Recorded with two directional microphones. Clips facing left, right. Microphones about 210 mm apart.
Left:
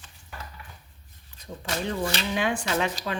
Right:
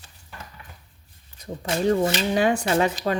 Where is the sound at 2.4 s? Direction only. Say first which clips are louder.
Right 6 dB; 40° right (ahead or behind).